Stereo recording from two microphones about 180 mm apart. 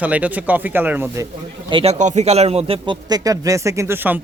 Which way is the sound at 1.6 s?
25° right (ahead or behind).